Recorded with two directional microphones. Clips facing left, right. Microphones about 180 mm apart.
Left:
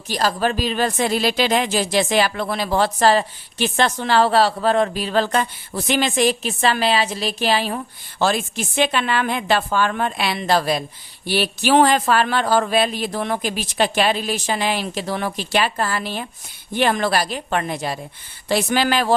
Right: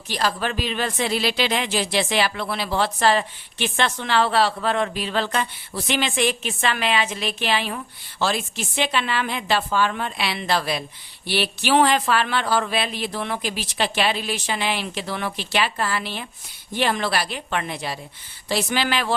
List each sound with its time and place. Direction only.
0.1 s speech: 40° left (ahead or behind)